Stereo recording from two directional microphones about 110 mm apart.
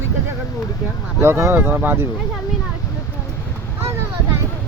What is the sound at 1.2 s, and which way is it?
Speech, 25° right (ahead or behind).